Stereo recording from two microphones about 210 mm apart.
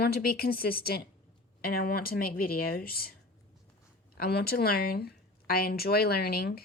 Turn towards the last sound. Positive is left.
turn(degrees=45)  # may be behind; listen again after turning